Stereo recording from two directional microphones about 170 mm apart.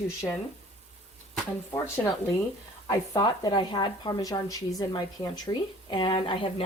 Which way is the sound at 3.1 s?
25° left (ahead or behind).